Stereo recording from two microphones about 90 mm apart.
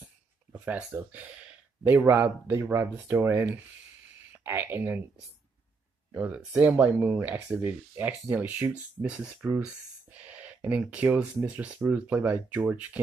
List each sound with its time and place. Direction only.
0.5 s speech: 20° right (ahead or behind)
6.1 s speech: 15° right (ahead or behind)
10.8 s speech: 10° right (ahead or behind)